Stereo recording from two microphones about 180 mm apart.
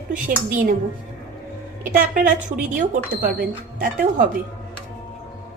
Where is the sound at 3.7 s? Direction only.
50° right (ahead or behind).